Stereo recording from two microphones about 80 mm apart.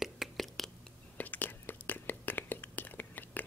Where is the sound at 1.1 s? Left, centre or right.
Left.